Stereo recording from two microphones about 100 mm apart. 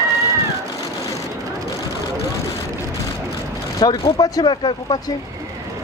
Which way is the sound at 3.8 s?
45° left (ahead or behind).